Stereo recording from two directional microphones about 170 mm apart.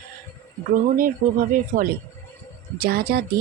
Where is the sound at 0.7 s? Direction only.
55° right (ahead or behind).